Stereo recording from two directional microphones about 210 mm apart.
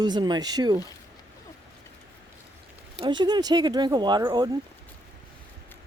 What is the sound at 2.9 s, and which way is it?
Speech, 20° right (ahead or behind).